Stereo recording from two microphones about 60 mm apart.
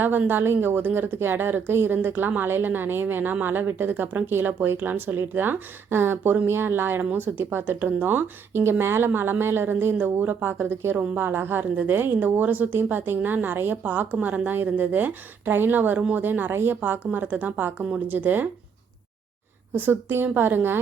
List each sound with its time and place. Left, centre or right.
0.0 s a woman's voice: right
7.0 s a woman's voice: right
19.7 s a woman's voice: right